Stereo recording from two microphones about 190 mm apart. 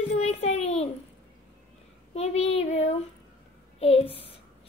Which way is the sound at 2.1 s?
35° left (ahead or behind).